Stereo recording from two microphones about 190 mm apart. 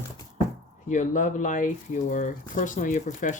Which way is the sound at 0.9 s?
40° left (ahead or behind).